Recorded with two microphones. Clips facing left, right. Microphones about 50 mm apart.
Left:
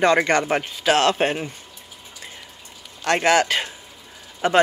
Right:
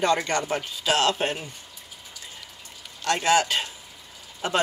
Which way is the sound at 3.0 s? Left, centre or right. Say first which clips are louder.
Left 4 dB; left.